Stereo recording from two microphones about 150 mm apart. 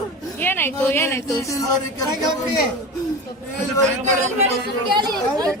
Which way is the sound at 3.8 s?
50° right (ahead or behind).